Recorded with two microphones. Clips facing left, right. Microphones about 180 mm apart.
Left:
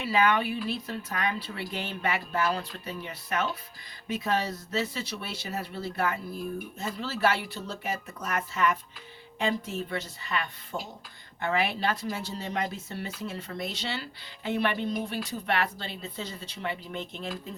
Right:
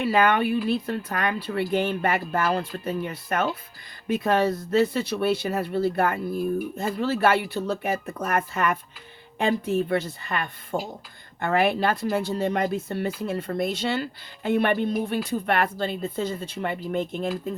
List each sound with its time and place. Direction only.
0.0 s speech: 55° right (ahead or behind)